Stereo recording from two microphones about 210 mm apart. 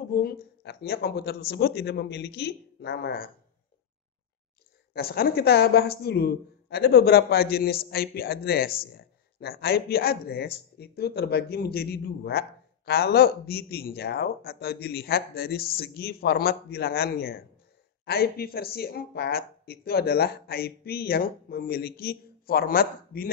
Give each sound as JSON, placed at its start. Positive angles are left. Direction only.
{"t": 0.1, "sound": "a woman's voice", "side_deg": 45}
{"t": 4.9, "sound": "a woman's voice", "side_deg": 50}